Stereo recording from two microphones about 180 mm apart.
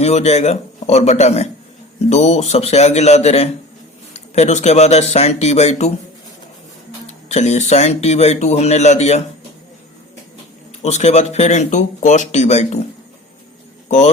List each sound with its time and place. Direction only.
0.0 s speech: 35° left (ahead or behind)
7.1 s speech: 40° left (ahead or behind)
10.8 s speech: 40° left (ahead or behind)
13.8 s speech: 40° left (ahead or behind)